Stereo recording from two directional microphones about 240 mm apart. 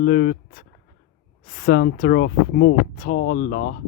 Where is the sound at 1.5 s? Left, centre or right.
Left.